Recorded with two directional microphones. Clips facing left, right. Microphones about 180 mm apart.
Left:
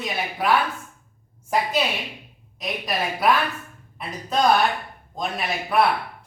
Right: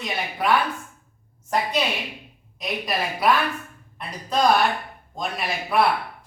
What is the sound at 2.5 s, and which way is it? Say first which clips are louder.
A man's voice: even; centre (ahead or behind).